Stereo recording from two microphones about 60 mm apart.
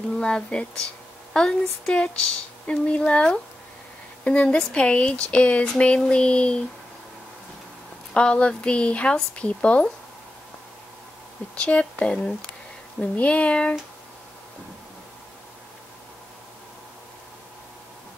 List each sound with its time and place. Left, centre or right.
0.2 s a woman's voice: centre
8.1 s a woman's voice: centre
11.5 s a woman's voice: centre